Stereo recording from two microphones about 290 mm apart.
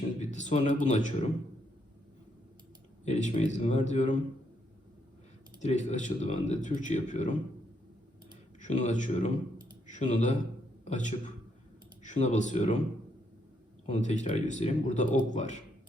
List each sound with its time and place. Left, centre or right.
0.2 s speech: left
3.0 s speech: left
5.5 s speech: left
8.6 s a man's voice: left
13.8 s speech: left